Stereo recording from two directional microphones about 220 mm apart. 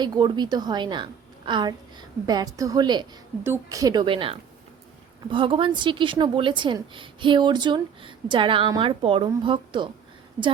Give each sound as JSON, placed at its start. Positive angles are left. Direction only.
{"t": 0.0, "sound": "a woman's voice", "side_deg": -20}